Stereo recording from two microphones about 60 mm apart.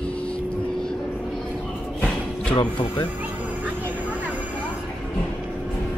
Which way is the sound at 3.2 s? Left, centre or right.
Right.